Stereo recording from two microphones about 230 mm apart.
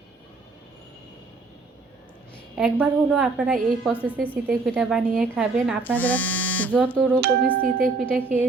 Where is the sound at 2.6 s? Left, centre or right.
Centre.